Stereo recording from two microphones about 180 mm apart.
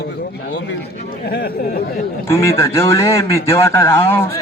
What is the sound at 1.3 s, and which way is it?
Speech, 60° left (ahead or behind).